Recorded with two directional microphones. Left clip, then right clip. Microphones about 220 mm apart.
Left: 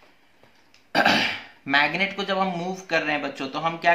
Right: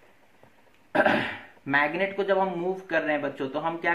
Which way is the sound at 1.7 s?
25° left (ahead or behind).